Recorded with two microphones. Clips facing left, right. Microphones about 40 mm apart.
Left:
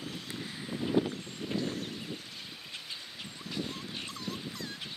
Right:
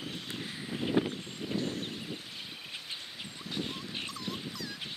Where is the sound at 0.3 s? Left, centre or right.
Centre.